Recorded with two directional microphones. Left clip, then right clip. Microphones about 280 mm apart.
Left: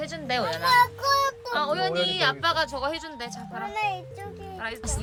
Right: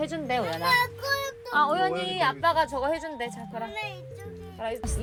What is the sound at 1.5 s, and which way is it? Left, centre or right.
Music, centre.